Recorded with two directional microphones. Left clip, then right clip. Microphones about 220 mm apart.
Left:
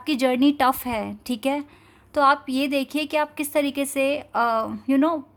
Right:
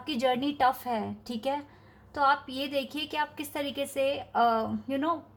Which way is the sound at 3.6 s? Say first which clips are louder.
Left 7 dB; 50° left (ahead or behind).